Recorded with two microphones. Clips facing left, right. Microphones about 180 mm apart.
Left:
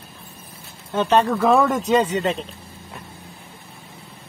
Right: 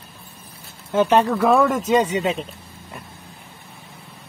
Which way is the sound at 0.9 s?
10° right (ahead or behind).